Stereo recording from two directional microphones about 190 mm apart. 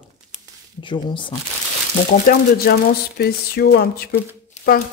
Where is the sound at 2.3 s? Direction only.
55° left (ahead or behind).